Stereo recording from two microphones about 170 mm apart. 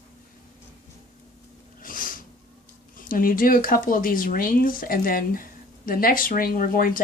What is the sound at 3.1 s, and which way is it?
Speech, 55° left (ahead or behind).